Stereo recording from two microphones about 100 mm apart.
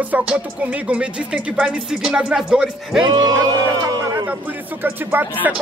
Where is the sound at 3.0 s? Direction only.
45° right (ahead or behind).